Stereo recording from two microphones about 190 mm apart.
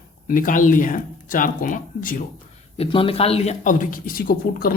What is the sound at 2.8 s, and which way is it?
Speech, 30° left (ahead or behind).